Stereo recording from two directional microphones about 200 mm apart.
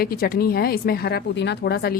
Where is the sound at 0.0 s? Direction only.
50° left (ahead or behind).